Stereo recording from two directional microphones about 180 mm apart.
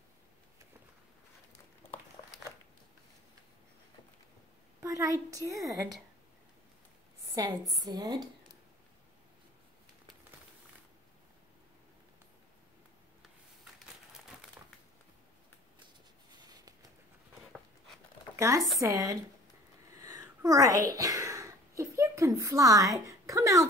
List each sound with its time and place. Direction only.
2.2 s a sound: 25° left (ahead or behind)
4.7 s a woman's voice: 15° right (ahead or behind)
7.3 s a woman's voice: 20° right (ahead or behind)
14.6 s crushing: 10° right (ahead or behind)
18.8 s speech: 15° right (ahead or behind)
20.0 s a sound: 20° right (ahead or behind)